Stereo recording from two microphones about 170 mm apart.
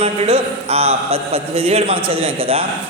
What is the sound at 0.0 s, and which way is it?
Speech, 35° right (ahead or behind).